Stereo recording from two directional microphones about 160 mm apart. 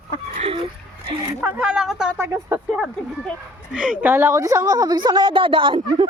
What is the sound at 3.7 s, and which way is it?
A woman's voice, 5° right (ahead or behind).